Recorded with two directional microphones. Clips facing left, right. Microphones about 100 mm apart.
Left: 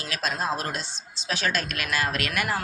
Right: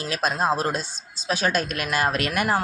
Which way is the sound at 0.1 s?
40° right (ahead or behind).